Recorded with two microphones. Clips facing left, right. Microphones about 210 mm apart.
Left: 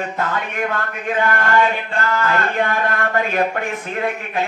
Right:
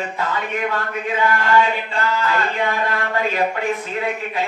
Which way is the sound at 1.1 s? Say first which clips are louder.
Even; 50° left (ahead or behind).